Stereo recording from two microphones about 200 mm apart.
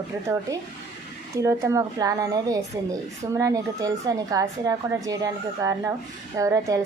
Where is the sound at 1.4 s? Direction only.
15° right (ahead or behind).